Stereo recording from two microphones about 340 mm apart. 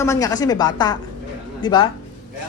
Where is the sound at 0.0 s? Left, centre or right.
Centre.